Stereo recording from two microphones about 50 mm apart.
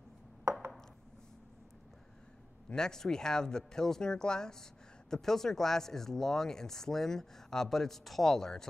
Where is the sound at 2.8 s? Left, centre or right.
Centre.